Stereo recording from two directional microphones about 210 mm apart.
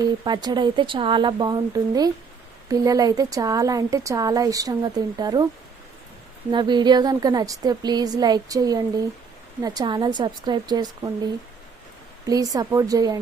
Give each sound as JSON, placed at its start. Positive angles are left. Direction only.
{"t": 0.0, "sound": "a woman's voice", "side_deg": -20}
{"t": 6.5, "sound": "a woman's voice", "side_deg": -20}
{"t": 12.2, "sound": "speech", "side_deg": -15}